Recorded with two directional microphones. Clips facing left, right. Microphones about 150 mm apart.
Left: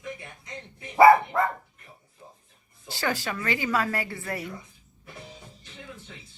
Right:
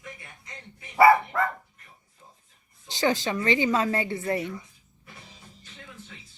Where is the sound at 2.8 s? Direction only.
20° right (ahead or behind).